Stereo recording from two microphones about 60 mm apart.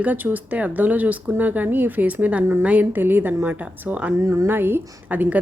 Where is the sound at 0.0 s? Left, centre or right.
Right.